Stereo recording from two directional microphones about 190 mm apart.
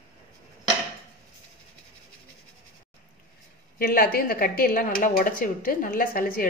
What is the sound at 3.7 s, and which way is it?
A woman's voice, 50° left (ahead or behind).